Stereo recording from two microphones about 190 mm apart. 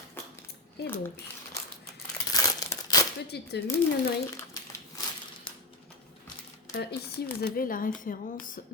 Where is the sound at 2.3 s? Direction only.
20° left (ahead or behind).